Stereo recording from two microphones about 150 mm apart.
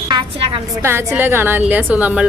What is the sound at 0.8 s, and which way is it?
A woman's voice, 15° right (ahead or behind).